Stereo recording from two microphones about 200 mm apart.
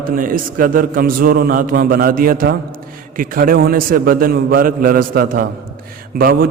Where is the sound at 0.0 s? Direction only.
45° right (ahead or behind).